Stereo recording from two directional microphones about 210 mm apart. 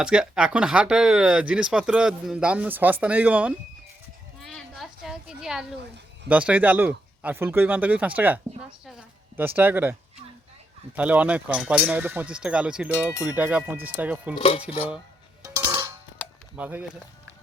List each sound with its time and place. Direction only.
0.0 s speech: 5° right (ahead or behind)
4.4 s children playing: centre (ahead or behind)
6.2 s speech: 5° right (ahead or behind)
10.9 s speech: 5° right (ahead or behind)
14.3 s cutlery: 25° left (ahead or behind)
15.4 s music: 15° right (ahead or behind)
16.6 s speech: 5° right (ahead or behind)